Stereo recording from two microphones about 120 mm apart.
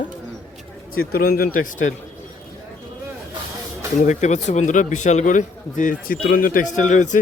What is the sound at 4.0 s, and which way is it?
A man's voice, 80° left.